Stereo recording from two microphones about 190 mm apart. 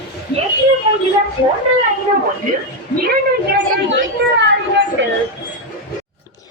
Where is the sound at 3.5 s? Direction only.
65° right (ahead or behind).